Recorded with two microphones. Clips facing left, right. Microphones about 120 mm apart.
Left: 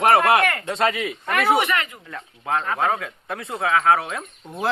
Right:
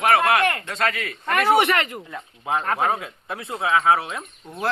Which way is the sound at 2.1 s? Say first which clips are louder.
Left 4 dB; 5° right (ahead or behind).